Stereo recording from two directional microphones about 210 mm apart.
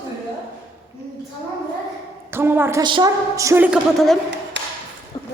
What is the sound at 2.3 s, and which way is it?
A woman's voice, 10° right (ahead or behind).